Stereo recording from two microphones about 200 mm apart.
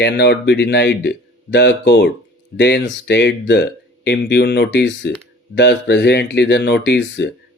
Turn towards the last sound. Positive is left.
turn(degrees=60)  # may be behind; listen again after turning